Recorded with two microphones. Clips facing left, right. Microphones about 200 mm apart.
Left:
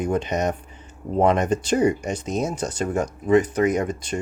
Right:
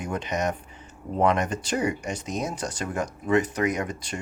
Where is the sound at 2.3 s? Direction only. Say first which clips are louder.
Left 5 dB; 25° left (ahead or behind).